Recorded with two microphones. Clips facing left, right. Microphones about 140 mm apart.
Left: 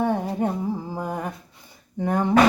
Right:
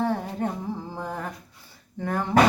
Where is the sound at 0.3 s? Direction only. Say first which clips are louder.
Left 4 dB; 10° left (ahead or behind).